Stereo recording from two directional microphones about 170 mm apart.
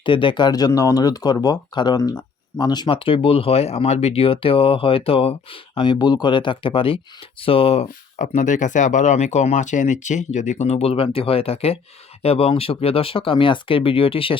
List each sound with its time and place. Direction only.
0.0 s speech: 30° left (ahead or behind)